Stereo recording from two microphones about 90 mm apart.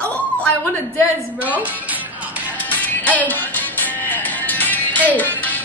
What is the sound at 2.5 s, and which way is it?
Music, 20° left (ahead or behind).